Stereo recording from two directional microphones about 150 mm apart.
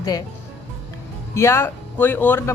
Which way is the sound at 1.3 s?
20° left (ahead or behind).